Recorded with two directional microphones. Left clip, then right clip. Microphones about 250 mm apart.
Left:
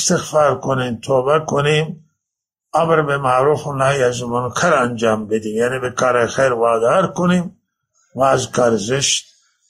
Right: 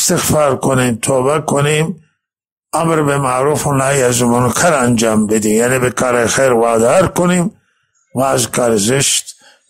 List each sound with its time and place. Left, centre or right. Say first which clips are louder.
0.0 s a man's voice: right 2 dB; right